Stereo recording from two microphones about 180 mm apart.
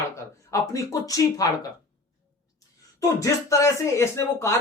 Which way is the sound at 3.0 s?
20° left (ahead or behind).